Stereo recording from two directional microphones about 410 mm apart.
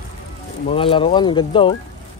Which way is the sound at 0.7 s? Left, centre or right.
Centre.